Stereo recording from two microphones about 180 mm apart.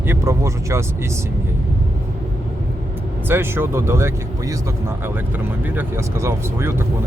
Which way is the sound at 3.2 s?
10° right (ahead or behind).